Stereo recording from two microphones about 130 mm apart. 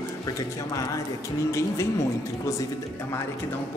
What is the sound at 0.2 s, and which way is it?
Speech, 25° left (ahead or behind).